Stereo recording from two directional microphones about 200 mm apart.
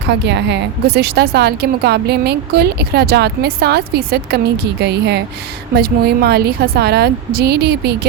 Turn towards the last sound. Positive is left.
turn(degrees=-55)  # may be behind; listen again after turning